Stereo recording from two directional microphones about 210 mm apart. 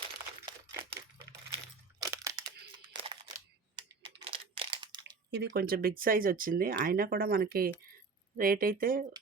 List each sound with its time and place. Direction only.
0.4 s coin: 20° right (ahead or behind)
2.0 s crunch: 15° right (ahead or behind)
2.7 s a sound: 20° right (ahead or behind)
5.3 s speech: 50° right (ahead or behind)